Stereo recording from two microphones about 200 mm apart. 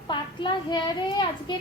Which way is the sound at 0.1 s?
25° left (ahead or behind).